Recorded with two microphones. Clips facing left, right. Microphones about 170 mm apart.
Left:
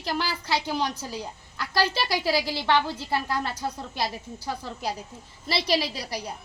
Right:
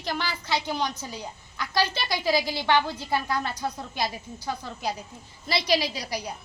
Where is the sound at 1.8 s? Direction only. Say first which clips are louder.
Left 5 dB; 35° left (ahead or behind).